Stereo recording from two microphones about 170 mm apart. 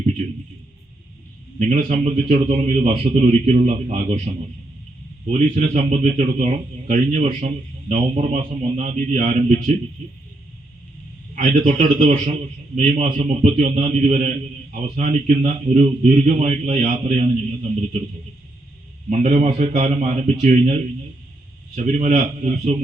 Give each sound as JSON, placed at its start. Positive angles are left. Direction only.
{"t": 1.5, "sound": "a man's voice", "side_deg": -45}
{"t": 5.2, "sound": "a man's voice", "side_deg": -45}
{"t": 11.3, "sound": "a man's voice", "side_deg": -45}
{"t": 19.1, "sound": "a man's voice", "side_deg": -45}
{"t": 21.8, "sound": "a man's voice", "side_deg": -45}